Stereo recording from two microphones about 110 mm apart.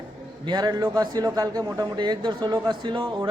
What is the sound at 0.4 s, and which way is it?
Speech, 40° right (ahead or behind).